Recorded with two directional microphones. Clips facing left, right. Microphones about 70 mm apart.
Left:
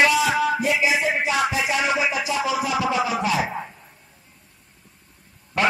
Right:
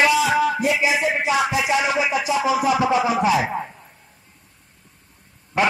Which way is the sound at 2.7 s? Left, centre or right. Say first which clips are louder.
Right 4 dB; right.